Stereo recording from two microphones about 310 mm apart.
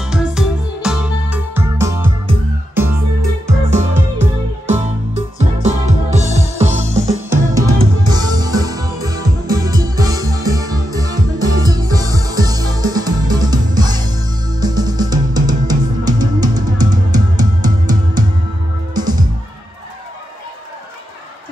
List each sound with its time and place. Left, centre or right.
0.0 s music: centre
5.1 s music: right
7.1 s music: centre